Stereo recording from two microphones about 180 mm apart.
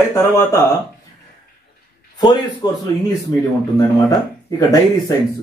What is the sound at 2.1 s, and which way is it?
Speech, 25° left (ahead or behind).